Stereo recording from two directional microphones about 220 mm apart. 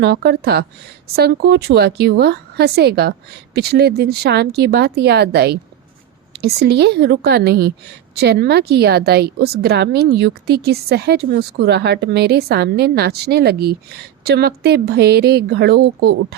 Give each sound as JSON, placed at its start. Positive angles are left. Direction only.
{"t": 0.0, "sound": "a woman's voice", "side_deg": -50}